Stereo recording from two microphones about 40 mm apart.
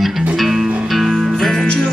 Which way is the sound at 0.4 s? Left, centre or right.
Centre.